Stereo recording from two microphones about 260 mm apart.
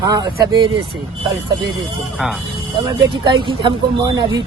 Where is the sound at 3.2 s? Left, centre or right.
Centre.